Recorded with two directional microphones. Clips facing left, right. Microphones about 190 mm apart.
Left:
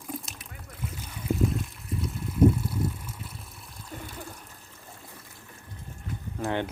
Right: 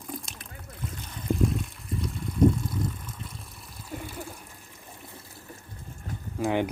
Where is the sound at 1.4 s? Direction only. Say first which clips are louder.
Right 1 dB; centre (ahead or behind).